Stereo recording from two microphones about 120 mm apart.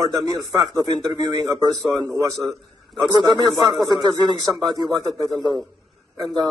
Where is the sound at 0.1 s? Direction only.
35° right (ahead or behind).